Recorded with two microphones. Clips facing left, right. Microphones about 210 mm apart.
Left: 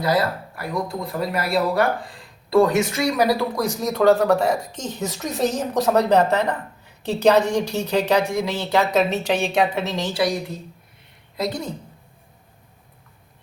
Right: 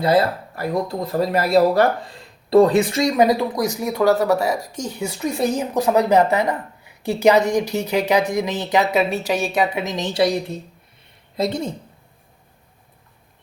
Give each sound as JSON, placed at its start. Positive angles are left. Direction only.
{"t": 0.0, "sound": "a woman's voice", "side_deg": -25}